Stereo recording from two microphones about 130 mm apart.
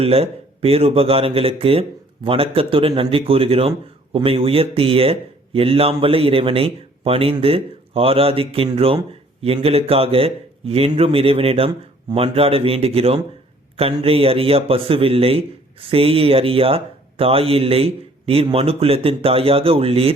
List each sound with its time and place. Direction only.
0.0 s a man's voice: 50° right (ahead or behind)